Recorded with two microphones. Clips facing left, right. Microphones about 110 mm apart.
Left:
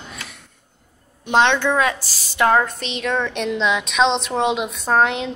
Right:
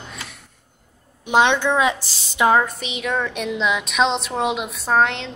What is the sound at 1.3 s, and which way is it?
A woman's voice, 10° right (ahead or behind).